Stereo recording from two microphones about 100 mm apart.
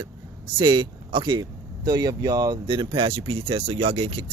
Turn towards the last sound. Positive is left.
turn(degrees=-75)  # may be behind; listen again after turning